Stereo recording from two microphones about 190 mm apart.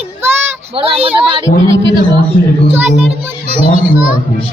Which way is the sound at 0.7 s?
30° right (ahead or behind).